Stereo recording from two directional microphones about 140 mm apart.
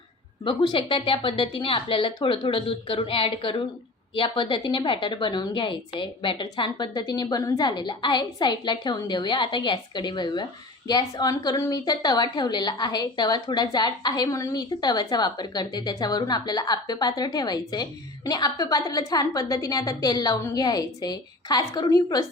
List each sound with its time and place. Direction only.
0.4 s a woman's voice: 35° left (ahead or behind)